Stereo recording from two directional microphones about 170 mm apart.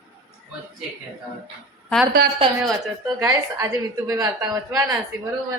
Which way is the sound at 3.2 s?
20° right (ahead or behind).